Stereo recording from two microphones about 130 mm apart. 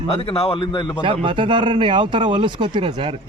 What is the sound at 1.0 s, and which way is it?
Speech, 40° right (ahead or behind).